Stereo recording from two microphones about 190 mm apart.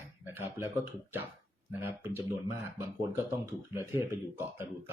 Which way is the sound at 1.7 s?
10° right (ahead or behind).